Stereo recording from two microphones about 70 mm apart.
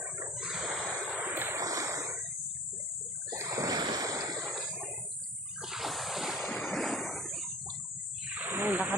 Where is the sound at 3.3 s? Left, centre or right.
Right.